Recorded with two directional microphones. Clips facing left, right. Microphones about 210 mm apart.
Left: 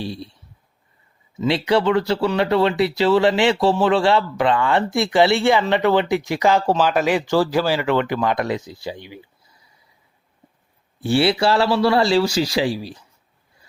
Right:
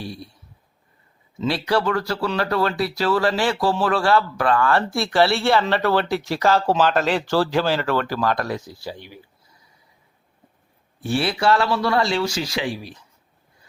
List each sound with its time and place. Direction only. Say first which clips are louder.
0.0 s speech: left 4 dB; 30° left (ahead or behind)
1.5 s speech: left 3 dB; 20° left (ahead or behind)
11.0 s speech: left 4 dB; 30° left (ahead or behind)